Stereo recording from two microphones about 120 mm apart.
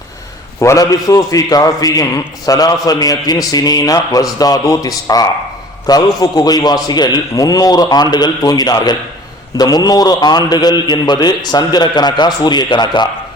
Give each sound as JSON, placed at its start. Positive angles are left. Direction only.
{"t": 0.6, "sound": "a man's voice", "side_deg": 25}